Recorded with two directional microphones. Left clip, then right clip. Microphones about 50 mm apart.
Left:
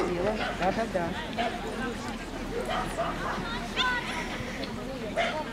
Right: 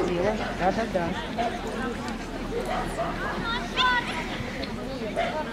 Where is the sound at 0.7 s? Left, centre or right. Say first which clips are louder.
Right 5 dB; centre.